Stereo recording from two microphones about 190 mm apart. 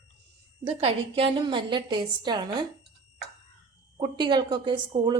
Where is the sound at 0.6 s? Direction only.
30° right (ahead or behind).